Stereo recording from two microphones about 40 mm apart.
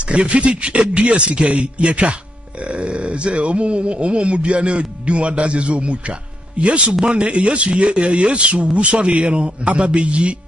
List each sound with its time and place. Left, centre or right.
0.0 s a man's voice: right